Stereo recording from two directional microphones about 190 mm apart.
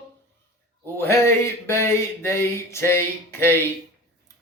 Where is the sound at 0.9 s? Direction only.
15° left (ahead or behind).